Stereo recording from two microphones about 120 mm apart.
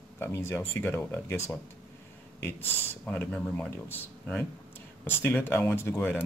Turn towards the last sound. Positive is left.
turn(degrees=20)  # may be behind; listen again after turning